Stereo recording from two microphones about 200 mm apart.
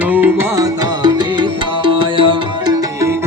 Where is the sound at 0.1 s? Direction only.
10° right (ahead or behind).